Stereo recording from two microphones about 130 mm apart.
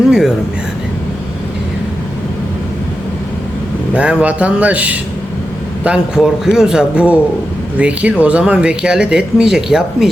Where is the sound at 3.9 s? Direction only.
10° right (ahead or behind).